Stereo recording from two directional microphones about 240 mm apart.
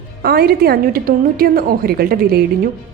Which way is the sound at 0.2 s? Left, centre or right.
Right.